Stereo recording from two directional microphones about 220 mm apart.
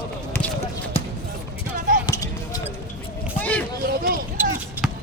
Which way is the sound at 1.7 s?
40° right (ahead or behind).